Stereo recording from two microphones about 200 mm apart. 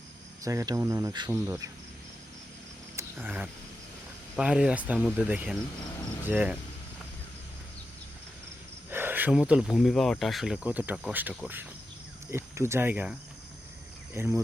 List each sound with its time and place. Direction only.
0.4 s cricket: 15° right (ahead or behind)
2.9 s wild animals: 10° right (ahead or behind)
4.4 s speech: 5° right (ahead or behind)
6.2 s cricket: 10° right (ahead or behind)
8.9 s speech: 10° right (ahead or behind)
12.3 s cricket: 15° right (ahead or behind)